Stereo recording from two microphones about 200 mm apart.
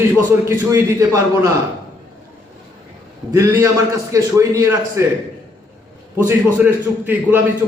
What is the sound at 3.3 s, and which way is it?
A man's voice, 15° right (ahead or behind).